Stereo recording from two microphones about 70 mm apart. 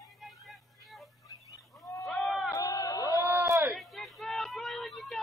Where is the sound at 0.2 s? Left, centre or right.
Centre.